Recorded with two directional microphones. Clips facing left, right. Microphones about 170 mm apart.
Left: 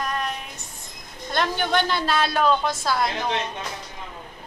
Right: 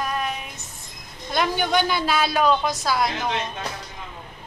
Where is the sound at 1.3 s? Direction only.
5° right (ahead or behind).